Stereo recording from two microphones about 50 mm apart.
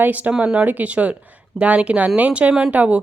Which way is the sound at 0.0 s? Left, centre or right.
Right.